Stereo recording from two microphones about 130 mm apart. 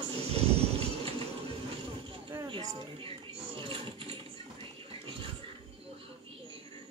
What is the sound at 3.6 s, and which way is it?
Sewing machine, 45° right (ahead or behind).